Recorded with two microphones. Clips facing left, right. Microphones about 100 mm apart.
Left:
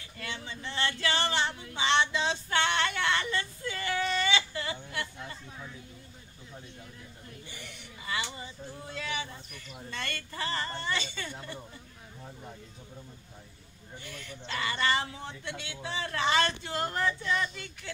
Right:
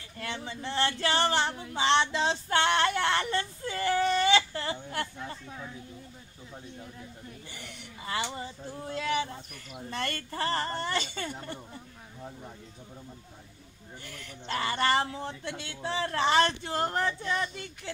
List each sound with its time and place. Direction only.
0.2 s speech: 30° right (ahead or behind)
8.0 s speech: 40° right (ahead or behind)
14.0 s speech: 45° right (ahead or behind)